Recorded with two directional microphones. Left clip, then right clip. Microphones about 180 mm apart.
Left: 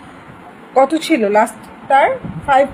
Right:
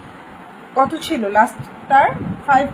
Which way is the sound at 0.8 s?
45° left (ahead or behind).